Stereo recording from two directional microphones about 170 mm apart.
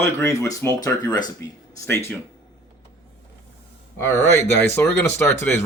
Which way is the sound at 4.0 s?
15° left (ahead or behind).